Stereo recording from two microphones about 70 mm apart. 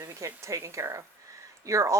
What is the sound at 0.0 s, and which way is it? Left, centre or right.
Speech, right.